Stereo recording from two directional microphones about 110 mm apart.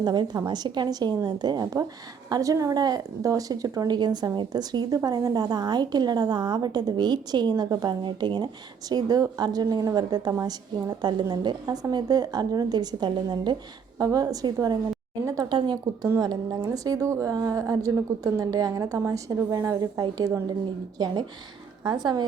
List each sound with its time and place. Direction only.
0.0 s a woman's voice: 40° right (ahead or behind)
15.4 s a woman's voice: 45° right (ahead or behind)
16.0 s a woman's voice: 30° right (ahead or behind)